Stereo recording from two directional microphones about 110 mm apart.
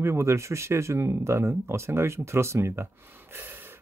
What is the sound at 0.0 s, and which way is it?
Speech, 25° right (ahead or behind).